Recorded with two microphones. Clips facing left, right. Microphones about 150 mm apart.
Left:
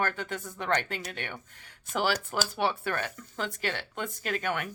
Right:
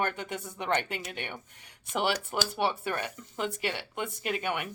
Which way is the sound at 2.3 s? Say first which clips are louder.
Even; 5° right (ahead or behind).